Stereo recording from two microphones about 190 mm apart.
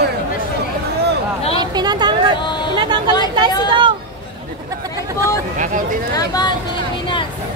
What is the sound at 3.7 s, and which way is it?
Hubbub, 25° right (ahead or behind).